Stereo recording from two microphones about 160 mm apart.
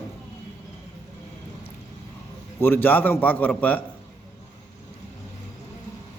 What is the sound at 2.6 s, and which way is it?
A man's voice, 15° left (ahead or behind).